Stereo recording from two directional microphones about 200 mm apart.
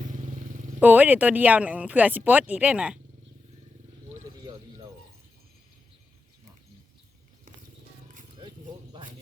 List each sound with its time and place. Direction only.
0.8 s speech: 10° right (ahead or behind)